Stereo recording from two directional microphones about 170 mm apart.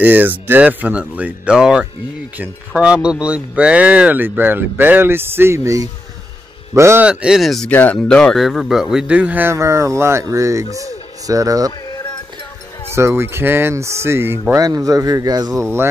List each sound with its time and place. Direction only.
0.0 s speech: 10° right (ahead or behind)
12.9 s speech: 15° right (ahead or behind)